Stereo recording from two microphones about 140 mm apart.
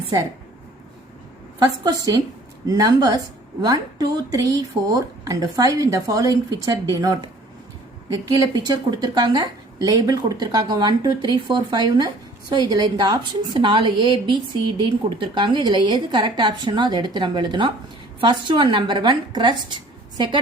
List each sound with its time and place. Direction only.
1.5 s speech: 25° right (ahead or behind)
8.1 s a woman's voice: 25° right (ahead or behind)
19.7 s a sound: 30° right (ahead or behind)